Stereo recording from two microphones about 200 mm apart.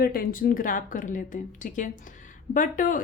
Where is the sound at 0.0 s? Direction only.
45° left (ahead or behind).